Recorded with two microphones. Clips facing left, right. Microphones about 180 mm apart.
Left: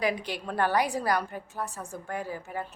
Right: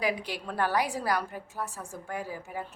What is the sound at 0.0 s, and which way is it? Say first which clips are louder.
A woman's voice: left 1 dB; 5° right (ahead or behind).